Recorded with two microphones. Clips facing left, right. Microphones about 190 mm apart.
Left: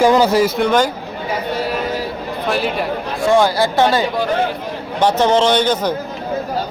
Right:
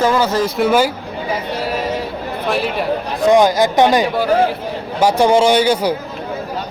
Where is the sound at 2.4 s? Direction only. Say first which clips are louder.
Even; centre (ahead or behind).